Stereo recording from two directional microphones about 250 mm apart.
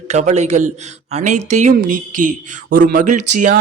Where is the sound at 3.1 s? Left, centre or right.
Right.